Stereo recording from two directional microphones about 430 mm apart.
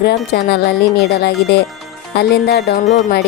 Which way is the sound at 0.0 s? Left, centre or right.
Left.